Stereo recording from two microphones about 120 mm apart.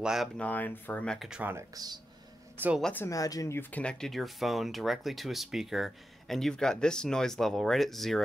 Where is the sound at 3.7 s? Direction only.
10° left (ahead or behind).